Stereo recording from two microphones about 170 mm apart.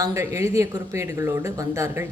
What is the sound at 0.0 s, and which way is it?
Speech, 15° right (ahead or behind).